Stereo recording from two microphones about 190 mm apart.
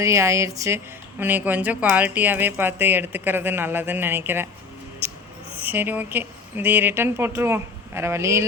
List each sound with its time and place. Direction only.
0.0 s speech: 15° right (ahead or behind)
5.6 s speech: 10° right (ahead or behind)